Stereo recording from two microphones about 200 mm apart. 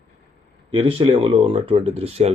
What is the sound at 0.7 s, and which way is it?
Speech, 25° right (ahead or behind).